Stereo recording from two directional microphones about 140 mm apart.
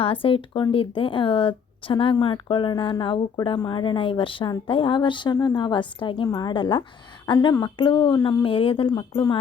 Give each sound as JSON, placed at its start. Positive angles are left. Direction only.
{"t": 0.0, "sound": "speech", "side_deg": 40}